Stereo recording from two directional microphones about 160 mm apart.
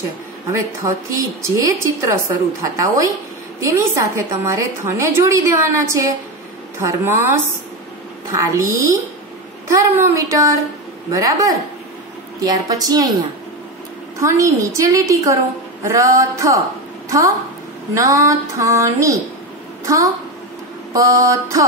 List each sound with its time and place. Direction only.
0.5 s a woman's voice: 20° right (ahead or behind)
14.2 s a woman's voice: 20° right (ahead or behind)
17.9 s a woman's voice: 20° right (ahead or behind)